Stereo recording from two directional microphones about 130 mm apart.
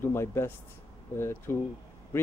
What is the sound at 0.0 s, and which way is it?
A man's voice, 20° left (ahead or behind).